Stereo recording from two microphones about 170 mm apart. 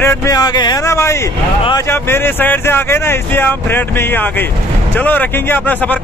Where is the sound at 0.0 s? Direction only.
20° left (ahead or behind).